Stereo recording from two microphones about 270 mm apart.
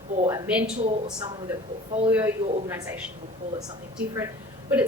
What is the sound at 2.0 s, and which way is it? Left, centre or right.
Speech, centre.